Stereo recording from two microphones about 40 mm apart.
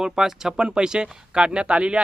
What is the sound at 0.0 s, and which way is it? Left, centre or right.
Speech, centre.